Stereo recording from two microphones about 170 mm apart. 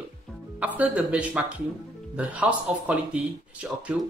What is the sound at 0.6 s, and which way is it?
Speech, 5° right (ahead or behind).